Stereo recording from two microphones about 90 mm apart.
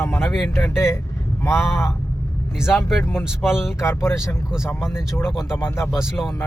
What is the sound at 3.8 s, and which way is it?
Speech, 30° left (ahead or behind).